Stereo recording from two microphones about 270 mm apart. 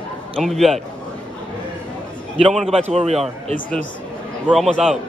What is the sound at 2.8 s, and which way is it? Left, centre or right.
Speech, right.